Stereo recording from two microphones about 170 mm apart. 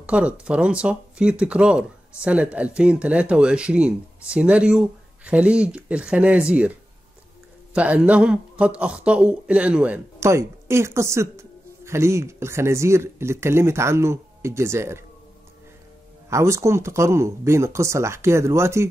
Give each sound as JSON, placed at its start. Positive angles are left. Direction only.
{"t": 0.0, "sound": "speech", "side_deg": -5}
{"t": 7.7, "sound": "speech", "side_deg": -10}
{"t": 16.3, "sound": "speech", "side_deg": -15}